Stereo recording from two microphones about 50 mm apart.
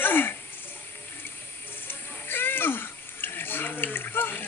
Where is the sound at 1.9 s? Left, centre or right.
Left.